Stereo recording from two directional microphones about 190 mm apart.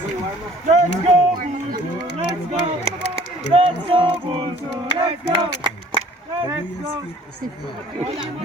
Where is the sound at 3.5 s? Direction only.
30° right (ahead or behind).